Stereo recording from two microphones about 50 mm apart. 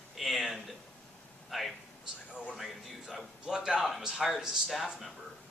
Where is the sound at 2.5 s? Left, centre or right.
Centre.